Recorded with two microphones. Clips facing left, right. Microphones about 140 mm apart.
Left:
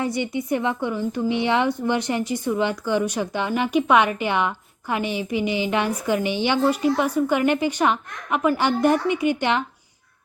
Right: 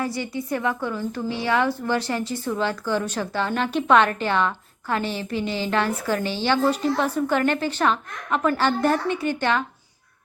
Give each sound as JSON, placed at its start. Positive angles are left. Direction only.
{"t": 0.0, "sound": "a woman's voice", "side_deg": 20}